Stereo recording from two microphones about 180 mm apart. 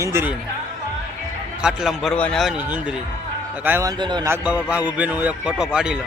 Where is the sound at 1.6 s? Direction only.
Centre (ahead or behind).